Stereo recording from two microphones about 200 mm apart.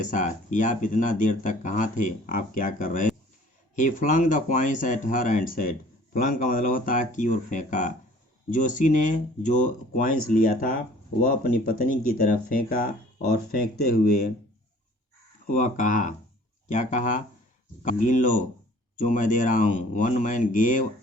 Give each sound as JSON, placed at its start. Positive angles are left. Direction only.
{"t": 0.0, "sound": "speech", "side_deg": 40}
{"t": 15.4, "sound": "speech", "side_deg": 40}